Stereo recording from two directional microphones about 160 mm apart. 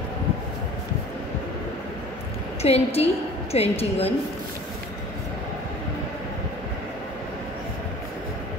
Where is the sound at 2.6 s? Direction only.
40° left (ahead or behind).